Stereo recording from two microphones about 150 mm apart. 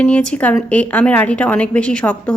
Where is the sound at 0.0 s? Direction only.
5° left (ahead or behind).